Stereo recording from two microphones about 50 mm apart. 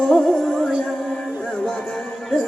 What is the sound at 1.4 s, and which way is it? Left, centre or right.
Music, centre.